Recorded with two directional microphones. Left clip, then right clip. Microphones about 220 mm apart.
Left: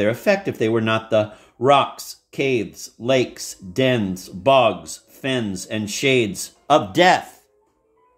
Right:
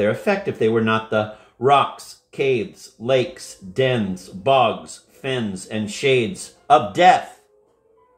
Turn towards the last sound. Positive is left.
turn(degrees=35)  # may be behind; listen again after turning